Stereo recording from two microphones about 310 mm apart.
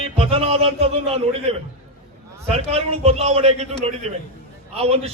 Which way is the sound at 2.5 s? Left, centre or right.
Centre.